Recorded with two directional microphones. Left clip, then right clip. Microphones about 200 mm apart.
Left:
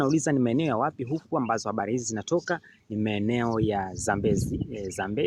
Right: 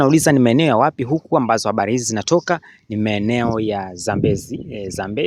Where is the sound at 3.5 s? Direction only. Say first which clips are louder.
Right 6 dB; 35° right (ahead or behind).